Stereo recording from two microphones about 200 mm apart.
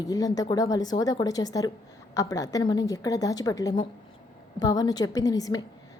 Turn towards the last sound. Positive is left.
turn(degrees=20)  # may be behind; listen again after turning